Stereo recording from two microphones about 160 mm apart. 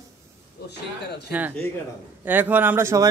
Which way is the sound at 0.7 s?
90° left.